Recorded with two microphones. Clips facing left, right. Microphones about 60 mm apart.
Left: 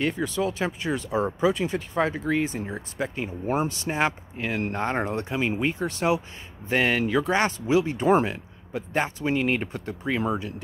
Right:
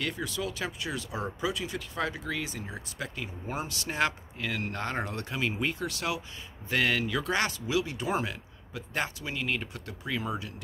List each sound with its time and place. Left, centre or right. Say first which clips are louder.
0.0 s speech: left 8 dB; left